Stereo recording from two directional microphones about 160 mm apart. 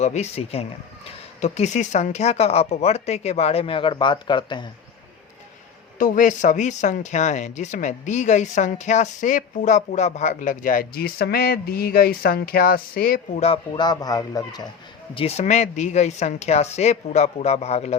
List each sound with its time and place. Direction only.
0.0 s speech: 45° left (ahead or behind); by 4.7 s 30° left (ahead or behind)
6.0 s speech: 60° left (ahead or behind)
13.3 s speech: 40° left (ahead or behind)
13.7 s speech: 25° left (ahead or behind)
15.1 s speech: 40° left (ahead or behind)